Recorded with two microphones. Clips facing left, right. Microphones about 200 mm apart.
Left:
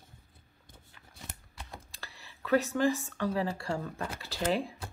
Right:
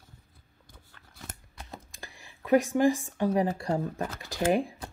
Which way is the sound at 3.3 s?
20° right (ahead or behind).